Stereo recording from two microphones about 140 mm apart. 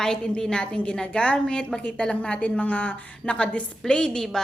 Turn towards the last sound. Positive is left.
turn(degrees=5)  # may be behind; listen again after turning